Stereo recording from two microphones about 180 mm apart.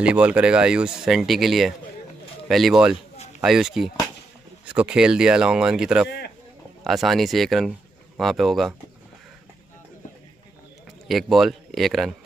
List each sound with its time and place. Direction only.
0.0 s speech: 5° right (ahead or behind)
6.0 s speech: 65° left (ahead or behind)
6.8 s speech: centre (ahead or behind)
11.1 s speech: centre (ahead or behind)